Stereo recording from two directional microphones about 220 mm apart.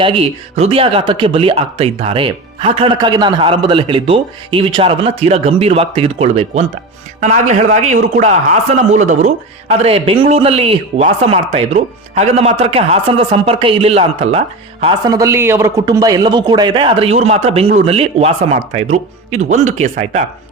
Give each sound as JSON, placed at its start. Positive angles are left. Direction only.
{"t": 0.0, "sound": "a man's voice", "side_deg": -25}